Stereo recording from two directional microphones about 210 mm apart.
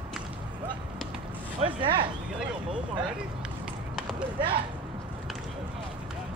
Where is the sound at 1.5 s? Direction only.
25° right (ahead or behind).